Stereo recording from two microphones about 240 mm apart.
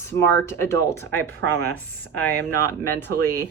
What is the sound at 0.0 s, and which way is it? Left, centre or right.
Speech, centre.